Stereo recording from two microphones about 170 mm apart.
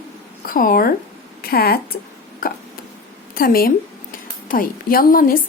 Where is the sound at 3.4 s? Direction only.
60° left (ahead or behind).